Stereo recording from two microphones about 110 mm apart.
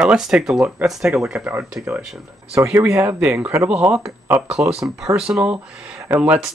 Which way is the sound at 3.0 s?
15° right (ahead or behind).